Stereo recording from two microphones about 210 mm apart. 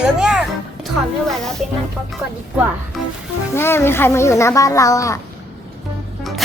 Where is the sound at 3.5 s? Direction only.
10° left (ahead or behind).